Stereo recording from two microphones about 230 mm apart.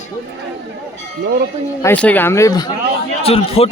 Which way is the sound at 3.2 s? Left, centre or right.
Left.